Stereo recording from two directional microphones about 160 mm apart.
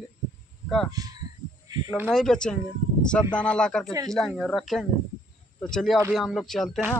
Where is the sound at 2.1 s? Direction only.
5° left (ahead or behind).